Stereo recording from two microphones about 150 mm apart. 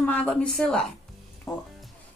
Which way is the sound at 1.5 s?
15° left (ahead or behind).